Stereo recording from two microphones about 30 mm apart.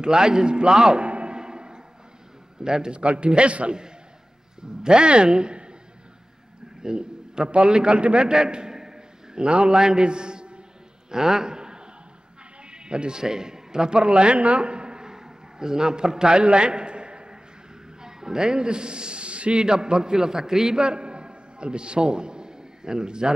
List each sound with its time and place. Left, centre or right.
0.0 s a man's voice: right
1.0 s a sound: right
1.3 s music: right
2.6 s a man's voice: right
3.0 s speech: right
4.6 s a man's voice: right
6.8 s a man's voice: right
8.7 s a sound: right
9.4 s a man's voice: right
11.1 s a sound: centre
12.7 s a man's voice: right
19.6 s a man's voice: right
20.7 s a sound: right